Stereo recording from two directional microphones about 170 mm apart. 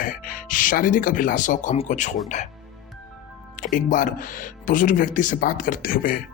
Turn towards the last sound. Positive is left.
turn(degrees=55)  # may be behind; listen again after turning